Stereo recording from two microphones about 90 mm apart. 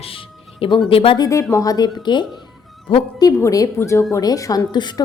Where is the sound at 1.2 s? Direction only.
35° left (ahead or behind); by 2.2 s 55° left (ahead or behind).